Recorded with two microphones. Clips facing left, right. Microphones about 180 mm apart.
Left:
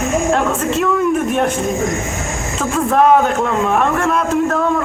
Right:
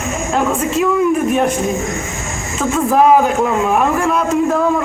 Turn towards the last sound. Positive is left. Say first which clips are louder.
# right 1 dB
turn(degrees=-5)  # may be behind; listen again after turning